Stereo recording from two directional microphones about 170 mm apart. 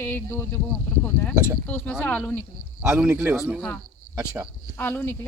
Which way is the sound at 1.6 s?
10° left (ahead or behind).